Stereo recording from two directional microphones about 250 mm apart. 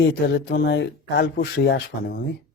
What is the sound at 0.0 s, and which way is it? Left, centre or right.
Speech, left.